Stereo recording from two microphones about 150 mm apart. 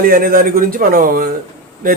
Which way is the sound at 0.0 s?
75° right (ahead or behind).